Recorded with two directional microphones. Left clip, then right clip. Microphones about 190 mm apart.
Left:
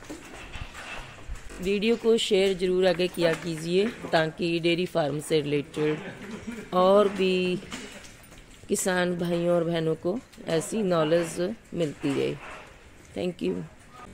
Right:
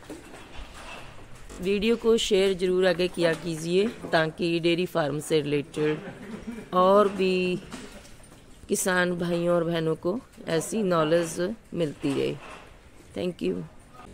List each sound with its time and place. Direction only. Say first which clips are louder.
1.5 s speech: even; centre (ahead or behind)
8.6 s speech: right 1 dB; centre (ahead or behind)